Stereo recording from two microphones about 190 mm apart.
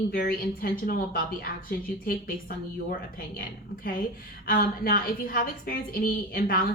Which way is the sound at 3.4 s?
50° left (ahead or behind).